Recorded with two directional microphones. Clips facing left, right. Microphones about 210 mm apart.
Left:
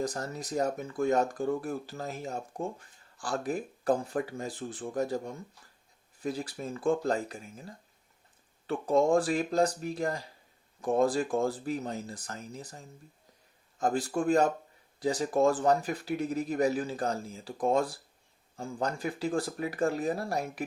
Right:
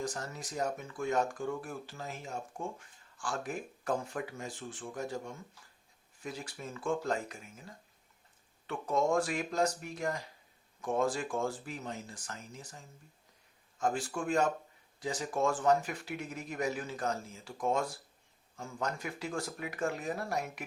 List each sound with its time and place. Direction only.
0.0 s speech: 35° left (ahead or behind)